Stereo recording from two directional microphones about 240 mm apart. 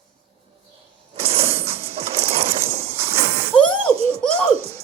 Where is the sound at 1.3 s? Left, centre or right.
Right.